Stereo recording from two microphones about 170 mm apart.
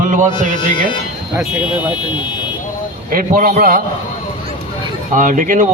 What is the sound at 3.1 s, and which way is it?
Speech, 55° right (ahead or behind).